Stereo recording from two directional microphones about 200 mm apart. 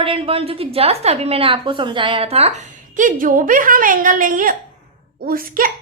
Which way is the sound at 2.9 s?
40° right (ahead or behind).